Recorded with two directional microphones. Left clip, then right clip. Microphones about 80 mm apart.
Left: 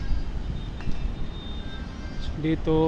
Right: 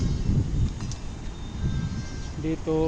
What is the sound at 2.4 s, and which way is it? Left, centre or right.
Speech, left.